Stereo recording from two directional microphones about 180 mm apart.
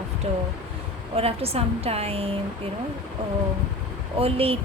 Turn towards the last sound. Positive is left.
turn(degrees=-30)  # may be behind; listen again after turning